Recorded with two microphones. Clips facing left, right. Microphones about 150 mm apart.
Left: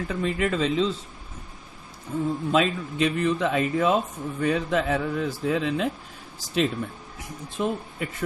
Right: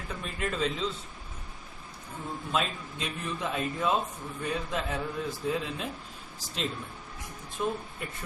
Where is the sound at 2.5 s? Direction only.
85° left.